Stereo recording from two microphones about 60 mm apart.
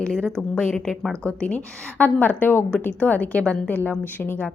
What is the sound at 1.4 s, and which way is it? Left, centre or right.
A woman's voice, left.